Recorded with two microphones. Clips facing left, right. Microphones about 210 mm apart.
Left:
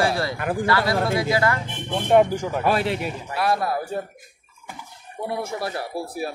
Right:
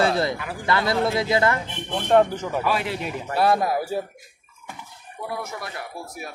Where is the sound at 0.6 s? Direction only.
25° right (ahead or behind).